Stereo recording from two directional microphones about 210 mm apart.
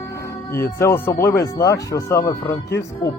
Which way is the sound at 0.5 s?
10° left (ahead or behind).